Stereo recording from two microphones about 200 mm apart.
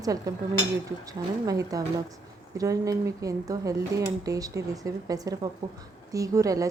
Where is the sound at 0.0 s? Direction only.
15° right (ahead or behind).